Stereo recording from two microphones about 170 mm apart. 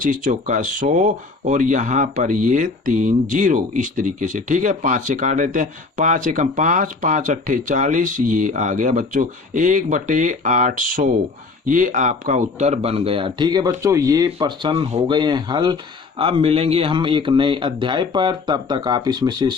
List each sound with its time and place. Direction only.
0.0 s speech: 50° right (ahead or behind); by 19.5 s 25° right (ahead or behind)